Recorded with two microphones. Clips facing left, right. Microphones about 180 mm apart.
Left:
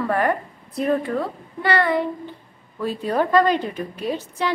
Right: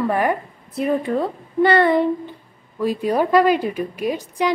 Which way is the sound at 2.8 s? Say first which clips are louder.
Right 3 dB; 10° right (ahead or behind).